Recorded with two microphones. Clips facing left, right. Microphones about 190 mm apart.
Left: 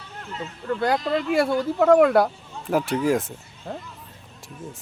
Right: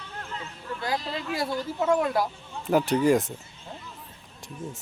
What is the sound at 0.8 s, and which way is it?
Speech, 65° left (ahead or behind).